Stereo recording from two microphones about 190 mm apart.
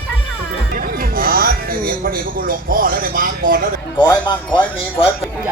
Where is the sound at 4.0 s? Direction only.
25° left (ahead or behind).